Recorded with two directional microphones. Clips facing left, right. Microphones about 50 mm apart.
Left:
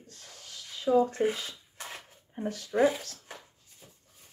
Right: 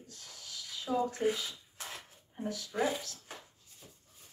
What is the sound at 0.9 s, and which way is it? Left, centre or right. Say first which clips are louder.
Speech: left 9 dB; centre.